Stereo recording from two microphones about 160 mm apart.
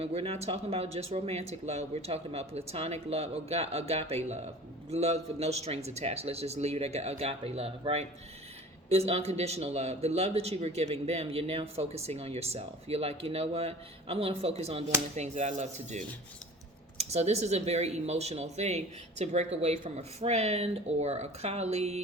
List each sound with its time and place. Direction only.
0.0 s speech: 40° right (ahead or behind)